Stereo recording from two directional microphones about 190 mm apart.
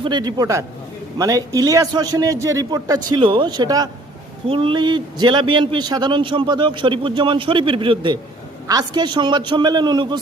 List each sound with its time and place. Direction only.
0.0 s a man's voice: 25° right (ahead or behind)